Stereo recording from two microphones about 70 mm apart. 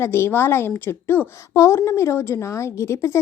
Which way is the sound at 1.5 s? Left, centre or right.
Left.